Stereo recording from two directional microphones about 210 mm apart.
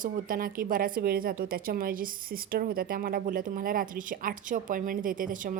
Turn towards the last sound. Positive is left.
turn(degrees=-40)  # may be behind; listen again after turning